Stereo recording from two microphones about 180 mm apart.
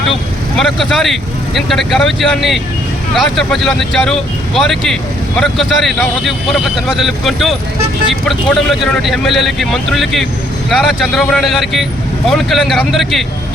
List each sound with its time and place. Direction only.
0.8 s speech: centre (ahead or behind)